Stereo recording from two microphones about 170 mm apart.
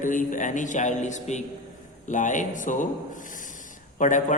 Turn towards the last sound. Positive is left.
turn(degrees=45)  # may be behind; listen again after turning